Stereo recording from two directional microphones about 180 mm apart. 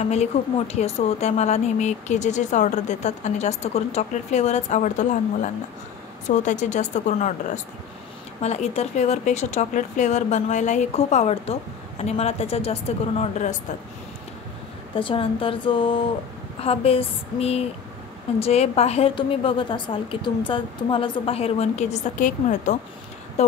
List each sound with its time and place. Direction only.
0.0 s a woman's voice: 35° left (ahead or behind)
15.0 s a woman's voice: 30° left (ahead or behind)